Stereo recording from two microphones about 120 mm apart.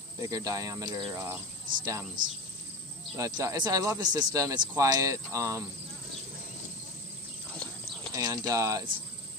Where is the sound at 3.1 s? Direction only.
30° right (ahead or behind).